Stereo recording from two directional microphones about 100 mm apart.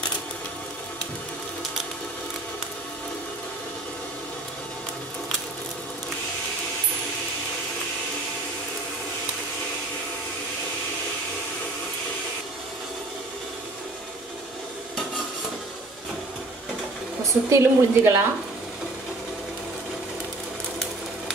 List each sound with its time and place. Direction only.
17.5 s a woman's voice: 25° right (ahead or behind)